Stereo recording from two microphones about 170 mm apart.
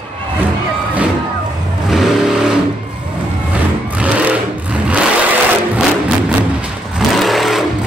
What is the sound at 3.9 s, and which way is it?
Vehicle, 5° right (ahead or behind).